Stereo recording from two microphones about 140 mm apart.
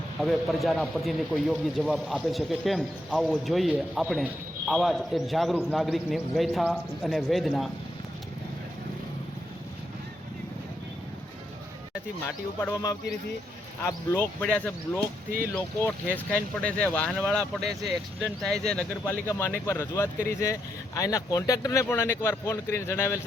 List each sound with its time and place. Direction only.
0.2 s a man's voice: centre (ahead or behind)
12.7 s speech: 25° left (ahead or behind)
14.4 s a man's voice: 10° left (ahead or behind)
19.3 s speech: 20° left (ahead or behind)